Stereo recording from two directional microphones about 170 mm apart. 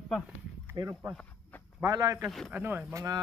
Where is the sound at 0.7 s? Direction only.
20° right (ahead or behind).